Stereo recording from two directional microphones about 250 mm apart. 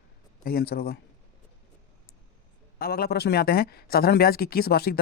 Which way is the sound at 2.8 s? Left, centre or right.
Left.